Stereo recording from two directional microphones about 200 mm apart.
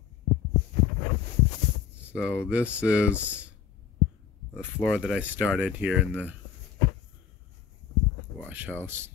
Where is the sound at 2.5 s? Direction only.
5° right (ahead or behind).